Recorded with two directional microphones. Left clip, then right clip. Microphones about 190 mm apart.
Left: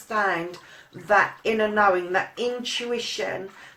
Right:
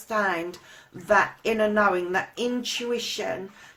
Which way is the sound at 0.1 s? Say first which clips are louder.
Left 1 dB; 40° right (ahead or behind).